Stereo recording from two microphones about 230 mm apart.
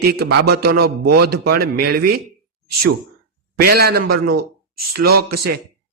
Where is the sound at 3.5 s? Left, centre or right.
Right.